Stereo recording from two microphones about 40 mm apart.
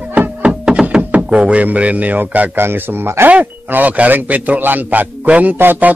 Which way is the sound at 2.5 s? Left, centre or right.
Right.